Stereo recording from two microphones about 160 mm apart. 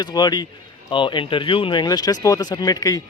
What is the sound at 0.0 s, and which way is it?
Speech, 25° left (ahead or behind).